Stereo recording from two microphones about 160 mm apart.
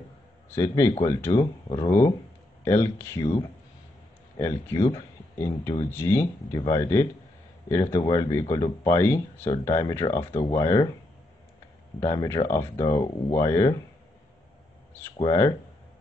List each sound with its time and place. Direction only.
0.5 s speech: 20° left (ahead or behind)
4.4 s speech: 15° left (ahead or behind)
12.0 s speech: 20° left (ahead or behind)
15.1 s speech: 25° left (ahead or behind)